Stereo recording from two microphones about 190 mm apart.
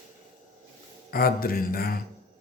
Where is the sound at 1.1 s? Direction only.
50° left (ahead or behind).